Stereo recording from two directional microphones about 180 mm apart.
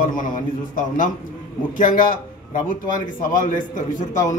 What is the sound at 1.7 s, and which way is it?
A man's voice, 50° left (ahead or behind).